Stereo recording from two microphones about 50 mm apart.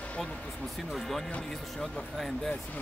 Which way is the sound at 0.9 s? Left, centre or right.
Centre.